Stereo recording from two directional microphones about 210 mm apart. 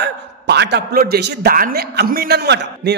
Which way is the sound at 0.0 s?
55° right (ahead or behind).